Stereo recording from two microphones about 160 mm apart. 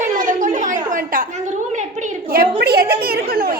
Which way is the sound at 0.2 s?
55° right (ahead or behind).